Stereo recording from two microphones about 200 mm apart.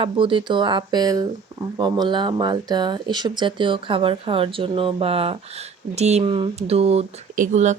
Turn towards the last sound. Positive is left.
turn(degrees=-35)  # may be behind; listen again after turning